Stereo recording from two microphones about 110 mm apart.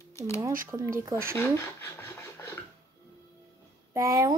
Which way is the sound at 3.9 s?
30° right (ahead or behind).